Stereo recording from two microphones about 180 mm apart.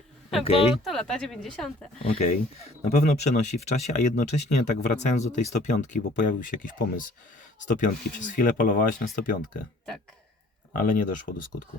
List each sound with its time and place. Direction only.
0.4 s speech: 35° left (ahead or behind)
0.9 s a woman's voice: 5° left (ahead or behind)
2.0 s speech: 40° left (ahead or behind)
10.7 s speech: 50° left (ahead or behind)